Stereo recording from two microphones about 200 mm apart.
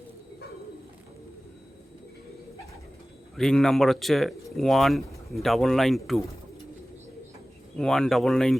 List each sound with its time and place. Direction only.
3.3 s speech: centre (ahead or behind)
7.8 s speech: 5° left (ahead or behind)